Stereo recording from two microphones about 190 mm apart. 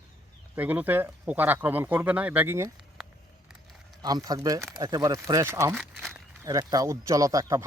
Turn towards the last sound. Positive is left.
turn(degrees=-15)  # may be behind; listen again after turning